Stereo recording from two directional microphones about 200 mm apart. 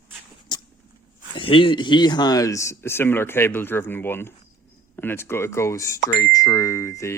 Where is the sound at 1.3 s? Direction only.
25° left (ahead or behind).